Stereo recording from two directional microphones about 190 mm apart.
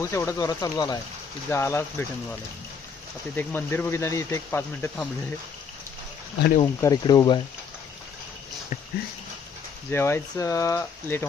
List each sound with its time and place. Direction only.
0.0 s speech: 15° left (ahead or behind)
3.3 s speech: 10° left (ahead or behind)
6.6 s speech: 20° left (ahead or behind)
9.8 s speech: 15° left (ahead or behind)